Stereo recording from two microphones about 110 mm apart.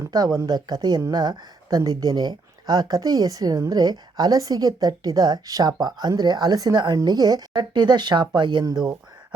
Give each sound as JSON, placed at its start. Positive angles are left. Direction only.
{"t": 0.1, "sound": "speech", "side_deg": -40}